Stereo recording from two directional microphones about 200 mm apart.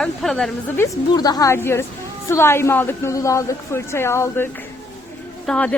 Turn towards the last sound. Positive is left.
turn(degrees=5)  # may be behind; listen again after turning